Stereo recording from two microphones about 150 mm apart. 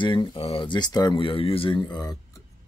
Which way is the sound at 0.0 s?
30° left (ahead or behind).